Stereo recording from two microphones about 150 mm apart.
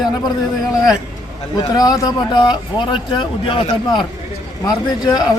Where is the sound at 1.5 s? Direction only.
25° left (ahead or behind).